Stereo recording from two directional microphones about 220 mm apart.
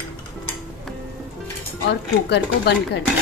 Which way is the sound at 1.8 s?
50° left (ahead or behind).